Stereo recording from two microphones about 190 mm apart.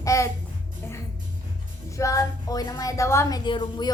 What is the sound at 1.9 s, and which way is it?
A woman's voice, 15° left (ahead or behind).